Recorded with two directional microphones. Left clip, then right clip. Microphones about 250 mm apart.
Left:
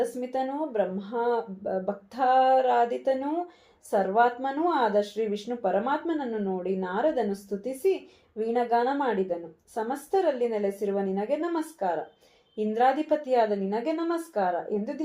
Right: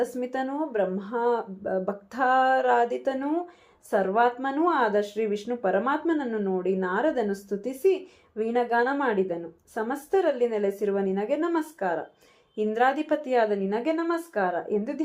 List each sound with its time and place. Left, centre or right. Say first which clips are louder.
0.0 s speech: even; right